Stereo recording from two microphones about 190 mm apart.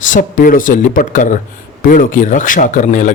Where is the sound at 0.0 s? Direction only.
45° left (ahead or behind).